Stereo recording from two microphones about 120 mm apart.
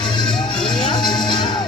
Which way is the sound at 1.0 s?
35° left (ahead or behind).